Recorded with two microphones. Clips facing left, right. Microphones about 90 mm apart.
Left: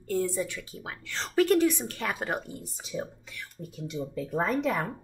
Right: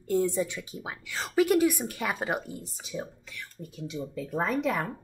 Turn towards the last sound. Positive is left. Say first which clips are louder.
# even
turn(degrees=0)  # may be behind; listen again after turning